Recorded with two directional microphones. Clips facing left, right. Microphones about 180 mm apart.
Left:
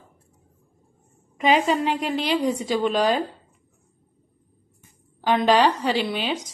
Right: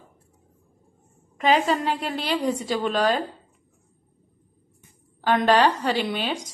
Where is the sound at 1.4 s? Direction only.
10° left (ahead or behind).